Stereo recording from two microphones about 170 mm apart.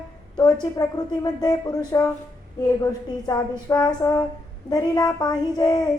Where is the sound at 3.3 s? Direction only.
25° left (ahead or behind).